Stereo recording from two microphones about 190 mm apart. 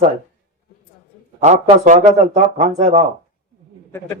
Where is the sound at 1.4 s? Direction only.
40° right (ahead or behind).